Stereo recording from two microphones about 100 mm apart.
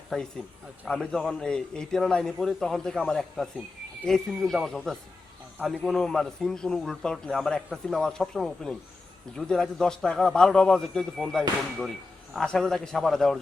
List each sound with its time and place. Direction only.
0.1 s a man's voice: 5° left (ahead or behind)